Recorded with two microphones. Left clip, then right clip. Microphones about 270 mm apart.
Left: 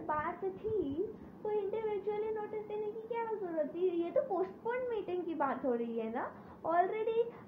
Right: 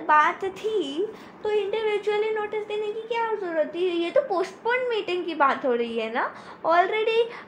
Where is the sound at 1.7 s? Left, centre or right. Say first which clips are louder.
Right 12 dB; right.